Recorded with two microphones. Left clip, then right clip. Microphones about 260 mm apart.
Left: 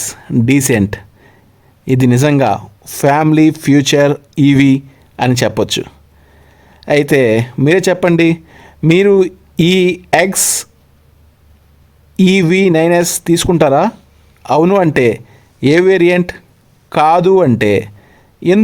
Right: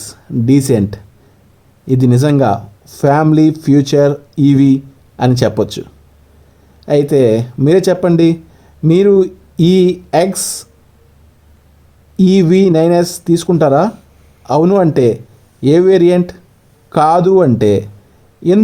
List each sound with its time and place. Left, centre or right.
0.0 s speech: left
6.8 s speech: left
12.2 s speech: left